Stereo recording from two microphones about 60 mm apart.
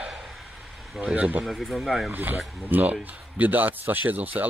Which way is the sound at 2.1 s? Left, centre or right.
Right.